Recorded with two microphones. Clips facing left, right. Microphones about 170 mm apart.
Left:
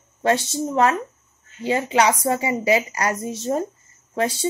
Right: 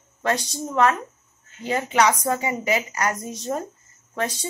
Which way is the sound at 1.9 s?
30° left (ahead or behind).